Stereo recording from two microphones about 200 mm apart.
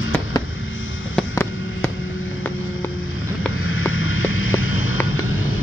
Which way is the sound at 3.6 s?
90° left.